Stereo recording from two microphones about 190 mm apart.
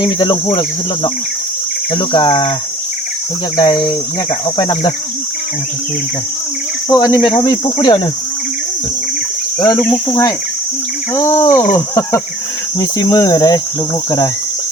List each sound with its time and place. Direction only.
0.0 s cricket: 25° left (ahead or behind)
1.9 s cricket: 25° left (ahead or behind)
3.6 s cricket: 25° left (ahead or behind)
6.8 s cricket: 20° left (ahead or behind)
9.6 s speech: 20° left (ahead or behind)